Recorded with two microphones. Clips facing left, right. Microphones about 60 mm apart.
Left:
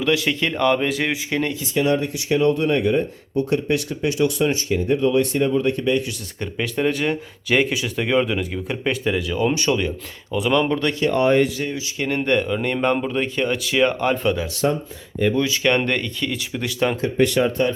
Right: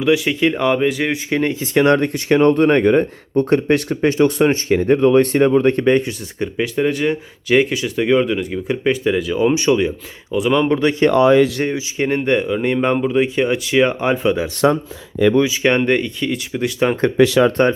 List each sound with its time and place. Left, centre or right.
0.0 s speech: centre
1.4 s speech: right
1.7 s speech: right
6.4 s speech: centre
10.7 s speech: centre
11.1 s speech: right
11.7 s speech: right
12.2 s speech: centre
13.6 s speech: centre
13.8 s speech: centre
14.6 s speech: right
15.8 s speech: centre
17.6 s speech: right